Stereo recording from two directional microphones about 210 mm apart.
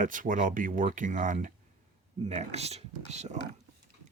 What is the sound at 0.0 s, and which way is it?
Speech, 40° right (ahead or behind).